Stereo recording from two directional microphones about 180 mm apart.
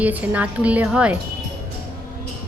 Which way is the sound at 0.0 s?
10° right (ahead or behind).